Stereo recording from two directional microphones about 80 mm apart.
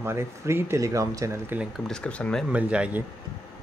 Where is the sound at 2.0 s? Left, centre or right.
Centre.